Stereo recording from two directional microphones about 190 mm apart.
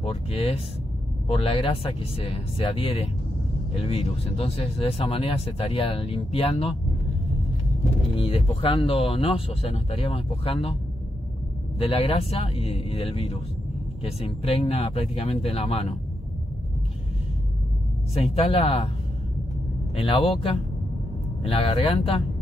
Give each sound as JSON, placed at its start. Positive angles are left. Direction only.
{"t": 0.0, "sound": "speech", "side_deg": 30}
{"t": 8.1, "sound": "speech", "side_deg": 30}
{"t": 11.8, "sound": "speech", "side_deg": 30}
{"t": 18.1, "sound": "speech", "side_deg": 30}
{"t": 20.0, "sound": "speech", "side_deg": 30}